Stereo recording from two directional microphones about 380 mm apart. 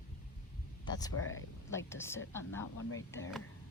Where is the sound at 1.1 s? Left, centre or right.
Left.